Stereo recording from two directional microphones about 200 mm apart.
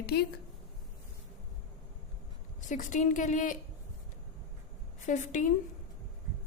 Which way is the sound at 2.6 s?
40° left (ahead or behind).